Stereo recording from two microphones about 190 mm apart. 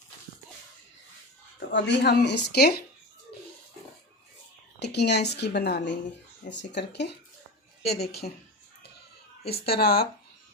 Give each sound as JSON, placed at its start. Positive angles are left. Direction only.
{"t": 1.5, "sound": "speech", "side_deg": 65}
{"t": 4.8, "sound": "speech", "side_deg": 60}
{"t": 9.5, "sound": "speech", "side_deg": 55}